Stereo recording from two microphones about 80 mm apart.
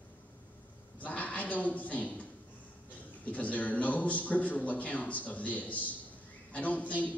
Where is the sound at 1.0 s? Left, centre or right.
Centre.